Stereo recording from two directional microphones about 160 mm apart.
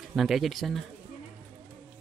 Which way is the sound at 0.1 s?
Centre (ahead or behind).